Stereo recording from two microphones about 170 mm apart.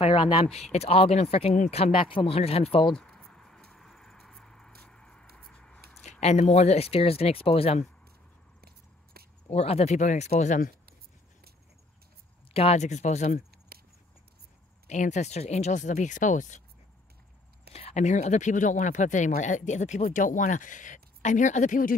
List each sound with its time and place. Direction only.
0.0 s speech: 35° left (ahead or behind)
2.8 s mouse: 5° left (ahead or behind)
5.3 s a sound: 5° left (ahead or behind)
6.2 s speech: 40° left (ahead or behind)
8.5 s biting: 65° right (ahead or behind)
9.5 s speech: 40° left (ahead or behind)
12.5 s speech: 40° left (ahead or behind)
14.9 s speech: 45° left (ahead or behind)
17.7 s speech: 40° left (ahead or behind)